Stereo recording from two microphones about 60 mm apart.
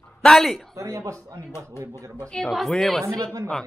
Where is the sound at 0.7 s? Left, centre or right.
Right.